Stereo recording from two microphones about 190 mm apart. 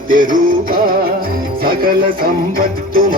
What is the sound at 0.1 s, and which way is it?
Music, 45° right (ahead or behind).